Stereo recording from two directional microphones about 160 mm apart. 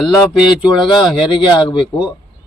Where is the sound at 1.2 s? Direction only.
30° left (ahead or behind).